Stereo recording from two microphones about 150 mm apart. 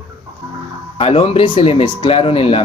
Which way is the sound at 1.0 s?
35° left (ahead or behind).